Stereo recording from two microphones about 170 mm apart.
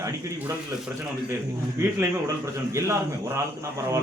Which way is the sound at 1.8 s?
15° right (ahead or behind).